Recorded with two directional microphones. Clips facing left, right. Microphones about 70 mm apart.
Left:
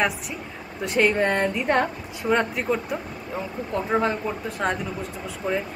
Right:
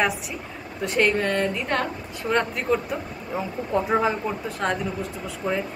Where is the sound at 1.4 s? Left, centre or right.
Centre.